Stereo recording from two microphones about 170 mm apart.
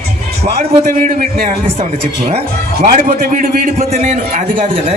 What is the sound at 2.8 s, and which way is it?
Speech, 55° right (ahead or behind).